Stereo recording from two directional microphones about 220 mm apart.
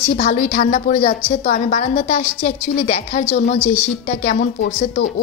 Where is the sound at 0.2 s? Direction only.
35° left (ahead or behind).